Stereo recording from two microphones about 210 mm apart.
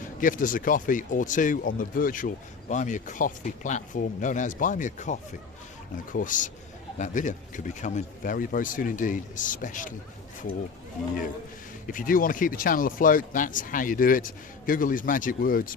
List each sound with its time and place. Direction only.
0.2 s speech: 40° left (ahead or behind)
11.9 s speech: 40° left (ahead or behind)